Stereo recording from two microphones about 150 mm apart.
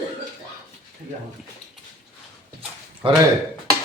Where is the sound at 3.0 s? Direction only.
35° right (ahead or behind).